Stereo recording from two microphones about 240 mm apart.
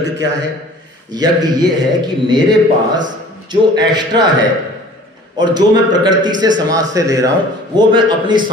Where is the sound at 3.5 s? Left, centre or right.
Centre.